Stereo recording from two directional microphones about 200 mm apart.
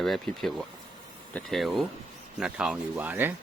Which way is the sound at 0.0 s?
Centre (ahead or behind).